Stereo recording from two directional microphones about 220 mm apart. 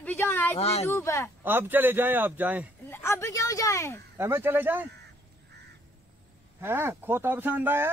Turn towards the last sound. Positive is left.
turn(degrees=-10)  # may be behind; listen again after turning